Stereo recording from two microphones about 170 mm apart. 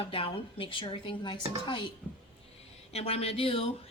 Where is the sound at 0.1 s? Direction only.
35° left (ahead or behind).